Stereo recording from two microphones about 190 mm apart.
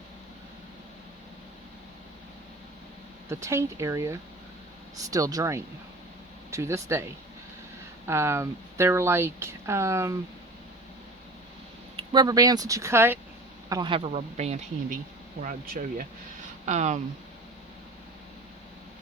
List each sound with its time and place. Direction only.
3.2 s speech: 15° right (ahead or behind)
8.0 s speech: 15° right (ahead or behind)
11.9 s speech: 20° right (ahead or behind); by 17.0 s 40° right (ahead or behind)